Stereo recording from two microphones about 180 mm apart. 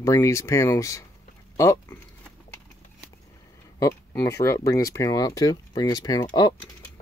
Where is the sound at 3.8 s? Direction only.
15° left (ahead or behind).